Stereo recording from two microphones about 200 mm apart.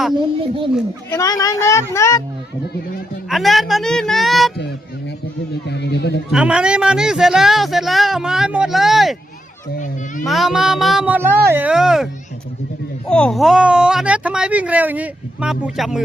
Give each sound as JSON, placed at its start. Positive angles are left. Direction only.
{"t": 0.1, "sound": "speech", "side_deg": -25}
{"t": 1.1, "sound": "speech", "side_deg": 15}
{"t": 3.2, "sound": "speech", "side_deg": 0}
{"t": 5.6, "sound": "speech", "side_deg": 55}
{"t": 6.3, "sound": "speech", "side_deg": -5}
{"t": 10.2, "sound": "speech", "side_deg": 0}
{"t": 13.1, "sound": "speech", "side_deg": 5}